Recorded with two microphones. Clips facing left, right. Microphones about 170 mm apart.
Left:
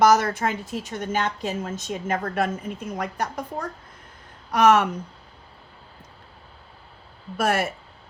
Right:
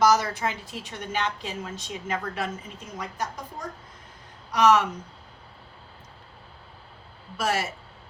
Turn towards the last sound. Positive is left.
turn(degrees=55)  # may be behind; listen again after turning